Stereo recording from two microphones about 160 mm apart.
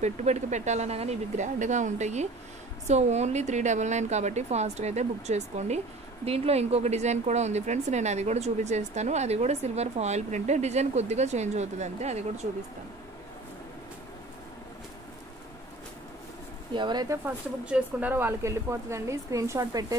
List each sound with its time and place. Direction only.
0.0 s a woman's voice: 45° right (ahead or behind)
16.7 s speech: 30° right (ahead or behind)
17.6 s a woman's voice: 10° right (ahead or behind)